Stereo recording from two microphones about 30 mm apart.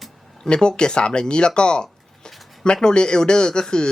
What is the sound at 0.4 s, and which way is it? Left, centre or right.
Speech, left.